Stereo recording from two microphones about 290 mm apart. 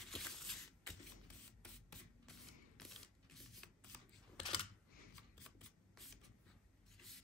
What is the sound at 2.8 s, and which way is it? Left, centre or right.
Shuffling cards, centre.